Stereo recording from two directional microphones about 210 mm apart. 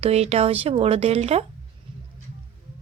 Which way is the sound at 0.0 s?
30° right (ahead or behind).